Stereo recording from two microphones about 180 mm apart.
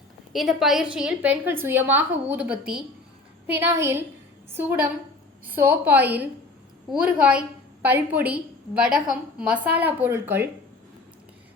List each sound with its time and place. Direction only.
0.3 s a woman's voice: centre (ahead or behind)
5.5 s a woman's voice: 10° right (ahead or behind)